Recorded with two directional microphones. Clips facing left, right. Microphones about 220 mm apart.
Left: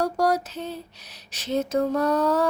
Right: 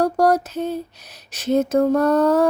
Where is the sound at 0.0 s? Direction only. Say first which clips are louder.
Right 6 dB; 50° right (ahead or behind).